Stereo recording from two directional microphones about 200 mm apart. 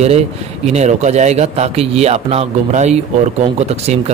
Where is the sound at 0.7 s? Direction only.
35° right (ahead or behind).